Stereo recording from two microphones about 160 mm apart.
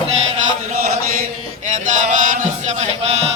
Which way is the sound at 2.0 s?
55° right (ahead or behind).